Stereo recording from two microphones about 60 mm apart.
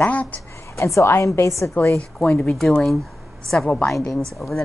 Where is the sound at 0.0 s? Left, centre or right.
Left.